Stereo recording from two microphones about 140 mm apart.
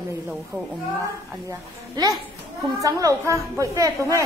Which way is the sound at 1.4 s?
30° right (ahead or behind).